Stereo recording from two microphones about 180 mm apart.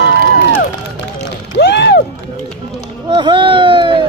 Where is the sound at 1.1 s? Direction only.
70° left (ahead or behind).